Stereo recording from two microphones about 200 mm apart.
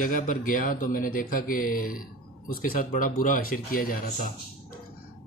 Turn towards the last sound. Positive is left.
turn(degrees=45)  # may be behind; listen again after turning